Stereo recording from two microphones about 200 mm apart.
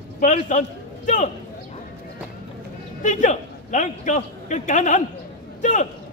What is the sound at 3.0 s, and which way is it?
A man's voice, 40° left (ahead or behind).